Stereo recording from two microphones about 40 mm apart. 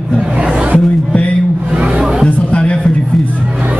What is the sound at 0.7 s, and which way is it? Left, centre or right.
Music, left.